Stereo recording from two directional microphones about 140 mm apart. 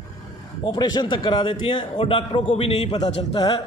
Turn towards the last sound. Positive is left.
turn(degrees=30)  # may be behind; listen again after turning